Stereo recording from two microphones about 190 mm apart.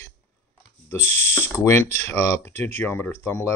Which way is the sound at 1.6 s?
15° left (ahead or behind).